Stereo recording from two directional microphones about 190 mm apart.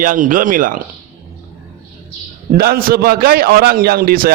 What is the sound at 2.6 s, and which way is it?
A man's voice, 50° right (ahead or behind).